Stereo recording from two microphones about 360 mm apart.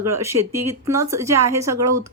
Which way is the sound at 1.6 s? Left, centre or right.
Right.